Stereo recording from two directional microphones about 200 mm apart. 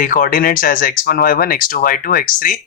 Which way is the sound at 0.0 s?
45° left (ahead or behind).